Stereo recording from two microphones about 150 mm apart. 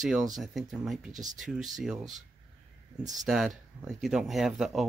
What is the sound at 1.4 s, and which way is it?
Speech, centre (ahead or behind).